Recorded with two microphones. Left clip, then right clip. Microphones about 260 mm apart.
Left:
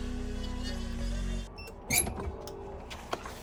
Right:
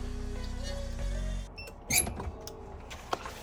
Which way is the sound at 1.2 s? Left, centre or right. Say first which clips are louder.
Left 1 dB; centre.